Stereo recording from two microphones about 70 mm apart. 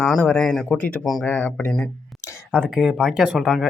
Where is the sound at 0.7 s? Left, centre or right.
Left.